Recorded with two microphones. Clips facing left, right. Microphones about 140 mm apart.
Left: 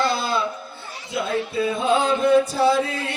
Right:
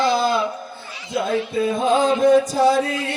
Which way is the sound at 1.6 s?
45° right (ahead or behind).